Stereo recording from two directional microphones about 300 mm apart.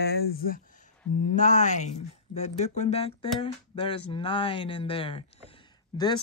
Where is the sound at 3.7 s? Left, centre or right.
Centre.